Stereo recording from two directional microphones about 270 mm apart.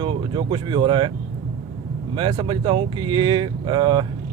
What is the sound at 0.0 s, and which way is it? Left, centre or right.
Speech, centre.